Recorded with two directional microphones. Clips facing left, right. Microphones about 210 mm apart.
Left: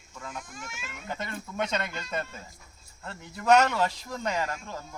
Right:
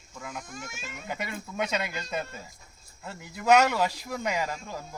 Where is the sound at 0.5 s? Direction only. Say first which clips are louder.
Right 2 dB; 40° right (ahead or behind).